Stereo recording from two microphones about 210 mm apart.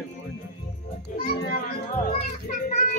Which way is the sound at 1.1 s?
45° left (ahead or behind).